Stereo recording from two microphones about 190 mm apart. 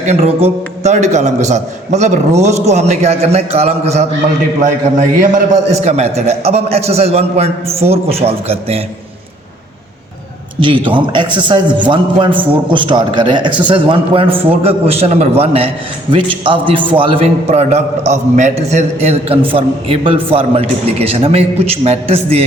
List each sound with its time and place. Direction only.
0.0 s a man's voice: 35° right (ahead or behind)
10.6 s a man's voice: 25° right (ahead or behind)